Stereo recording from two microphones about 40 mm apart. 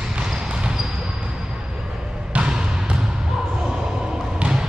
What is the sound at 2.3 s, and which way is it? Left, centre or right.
Basketball bounce, right.